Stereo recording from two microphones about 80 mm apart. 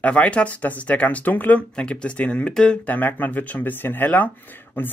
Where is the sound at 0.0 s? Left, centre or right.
Centre.